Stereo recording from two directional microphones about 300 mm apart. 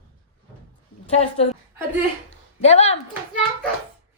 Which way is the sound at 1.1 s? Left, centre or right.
Left.